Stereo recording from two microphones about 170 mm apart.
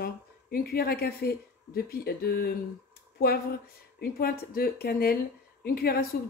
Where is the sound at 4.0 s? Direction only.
60° left (ahead or behind).